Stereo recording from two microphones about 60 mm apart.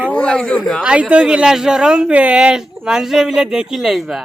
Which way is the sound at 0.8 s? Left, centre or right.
Centre.